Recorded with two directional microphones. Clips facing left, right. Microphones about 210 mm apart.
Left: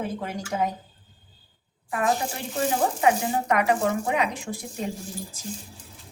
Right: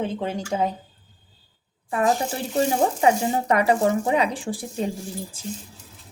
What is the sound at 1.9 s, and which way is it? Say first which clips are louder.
Speech: right 3 dB; 30° right (ahead or behind).